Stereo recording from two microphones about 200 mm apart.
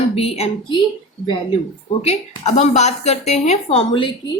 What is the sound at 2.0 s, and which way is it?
Speech, 35° left (ahead or behind).